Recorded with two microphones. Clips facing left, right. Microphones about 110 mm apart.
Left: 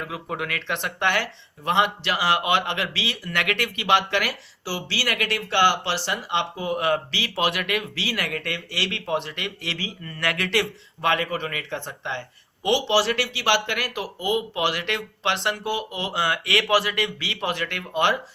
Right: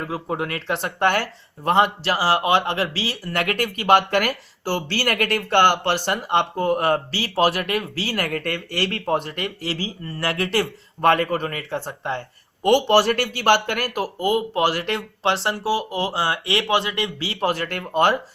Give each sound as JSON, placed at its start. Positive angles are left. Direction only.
{"t": 0.0, "sound": "speech", "side_deg": -35}
{"t": 12.6, "sound": "speech", "side_deg": -50}